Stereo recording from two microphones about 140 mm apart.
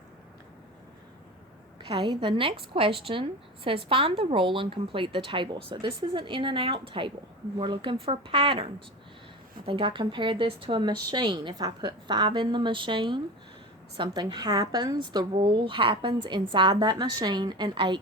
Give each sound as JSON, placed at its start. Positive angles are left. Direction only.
{"t": 1.9, "sound": "a woman's voice", "side_deg": -35}